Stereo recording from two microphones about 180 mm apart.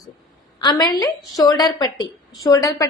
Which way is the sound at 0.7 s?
20° left (ahead or behind).